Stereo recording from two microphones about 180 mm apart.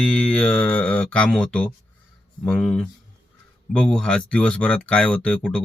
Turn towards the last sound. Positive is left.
turn(degrees=5)  # may be behind; listen again after turning